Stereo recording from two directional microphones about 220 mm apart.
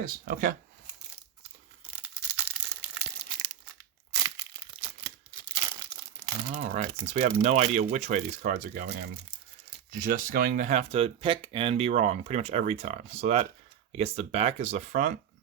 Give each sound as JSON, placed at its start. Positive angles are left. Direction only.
{"t": 0.0, "sound": "speech", "side_deg": -40}
{"t": 2.0, "sound": "crumpling", "side_deg": -5}
{"t": 5.5, "sound": "crumpling", "side_deg": -15}
{"t": 6.5, "sound": "speech", "side_deg": -35}